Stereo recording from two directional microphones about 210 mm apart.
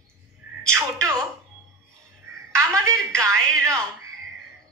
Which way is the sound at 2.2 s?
15° right (ahead or behind).